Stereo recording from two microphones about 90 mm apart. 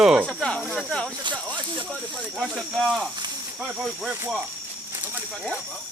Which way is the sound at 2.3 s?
5° right (ahead or behind).